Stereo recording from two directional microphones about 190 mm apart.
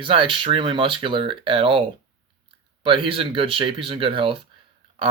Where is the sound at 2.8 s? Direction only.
25° right (ahead or behind).